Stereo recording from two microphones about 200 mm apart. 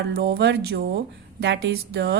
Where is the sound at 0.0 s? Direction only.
60° right (ahead or behind).